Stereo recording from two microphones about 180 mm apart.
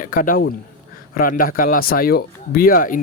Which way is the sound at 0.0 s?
50° left (ahead or behind).